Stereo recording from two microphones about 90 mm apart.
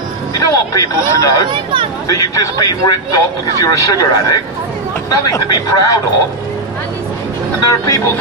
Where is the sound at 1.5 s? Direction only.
65° right (ahead or behind).